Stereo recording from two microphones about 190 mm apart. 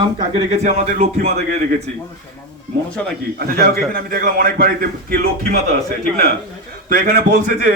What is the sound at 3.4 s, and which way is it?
A man's voice, 55° right (ahead or behind).